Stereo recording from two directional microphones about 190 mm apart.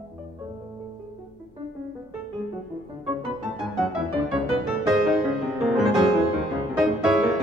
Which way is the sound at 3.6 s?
5° right (ahead or behind).